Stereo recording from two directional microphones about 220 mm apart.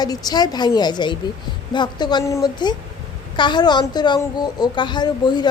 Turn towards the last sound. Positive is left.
turn(degrees=20)  # may be behind; listen again after turning